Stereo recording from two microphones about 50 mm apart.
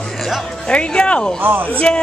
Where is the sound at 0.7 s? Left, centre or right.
Left.